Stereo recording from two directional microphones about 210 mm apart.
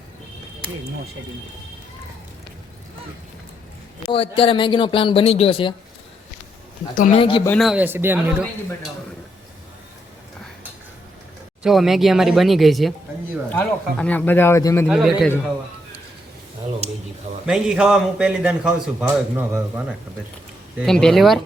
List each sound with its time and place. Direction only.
4.1 s speech: 25° left (ahead or behind)
6.9 s speech: 40° left (ahead or behind)
7.2 s speech: 25° left (ahead or behind)
7.4 s a man's voice: 5° left (ahead or behind)
11.6 s a man's voice: centre (ahead or behind)
14.8 s a man's voice: centre (ahead or behind)
16.8 s a sound: 30° right (ahead or behind)
17.4 s a man's voice: 5° right (ahead or behind)
20.7 s a man's voice: centre (ahead or behind)